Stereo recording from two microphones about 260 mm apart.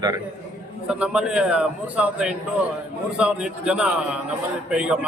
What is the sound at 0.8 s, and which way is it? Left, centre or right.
A man's voice, centre.